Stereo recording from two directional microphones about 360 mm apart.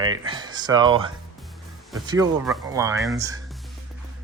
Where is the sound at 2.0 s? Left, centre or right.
Centre.